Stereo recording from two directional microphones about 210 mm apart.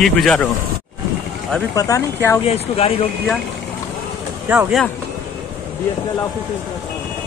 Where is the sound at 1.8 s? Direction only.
15° left (ahead or behind).